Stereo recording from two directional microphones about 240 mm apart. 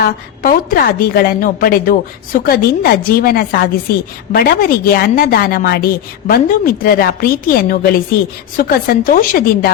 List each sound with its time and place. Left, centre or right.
0.4 s a woman's voice: left